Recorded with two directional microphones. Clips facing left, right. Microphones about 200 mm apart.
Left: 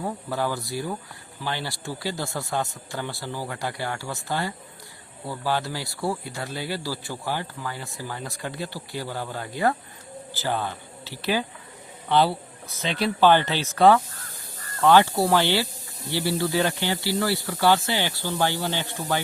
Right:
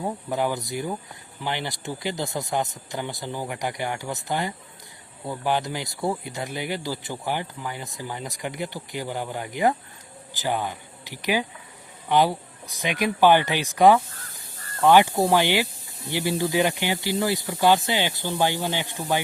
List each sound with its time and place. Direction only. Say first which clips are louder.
0.0 s speech: right 2 dB; 20° right (ahead or behind)